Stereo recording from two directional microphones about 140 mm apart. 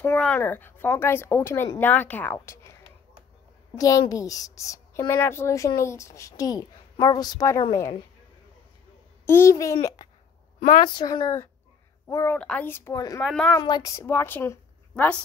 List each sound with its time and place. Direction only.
0.2 s speech: 10° left (ahead or behind)
3.7 s a woman's voice: 25° left (ahead or behind)
9.2 s a woman's voice: 20° left (ahead or behind)
10.6 s a woman's voice: 65° left (ahead or behind)
10.9 s a woman's voice: 30° left (ahead or behind)
12.4 s speech: 10° left (ahead or behind)
12.9 s a woman's voice: 30° left (ahead or behind)
13.2 s speech: 5° left (ahead or behind)
13.6 s a woman's voice: 30° left (ahead or behind)